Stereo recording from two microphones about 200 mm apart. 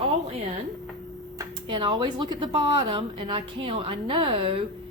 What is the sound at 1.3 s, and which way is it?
Speech, 25° right (ahead or behind).